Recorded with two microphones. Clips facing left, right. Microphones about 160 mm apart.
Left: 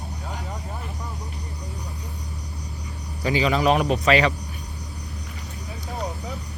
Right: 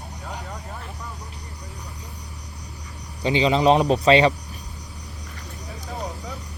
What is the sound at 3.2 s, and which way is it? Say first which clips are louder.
Speech: right 2 dB; 25° right (ahead or behind).